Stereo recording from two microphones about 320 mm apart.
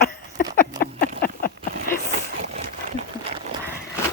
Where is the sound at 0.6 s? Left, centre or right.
Left.